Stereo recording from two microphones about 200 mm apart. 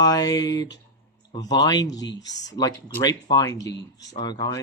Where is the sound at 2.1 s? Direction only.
65° left (ahead or behind).